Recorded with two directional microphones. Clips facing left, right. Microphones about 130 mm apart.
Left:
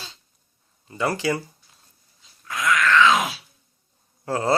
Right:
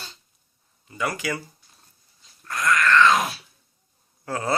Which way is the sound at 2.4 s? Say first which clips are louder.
Even; centre (ahead or behind).